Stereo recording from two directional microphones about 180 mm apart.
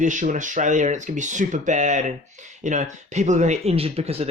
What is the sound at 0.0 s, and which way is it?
Speech, 45° right (ahead or behind).